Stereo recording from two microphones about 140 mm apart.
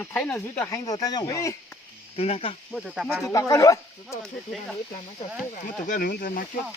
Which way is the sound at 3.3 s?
25° left (ahead or behind).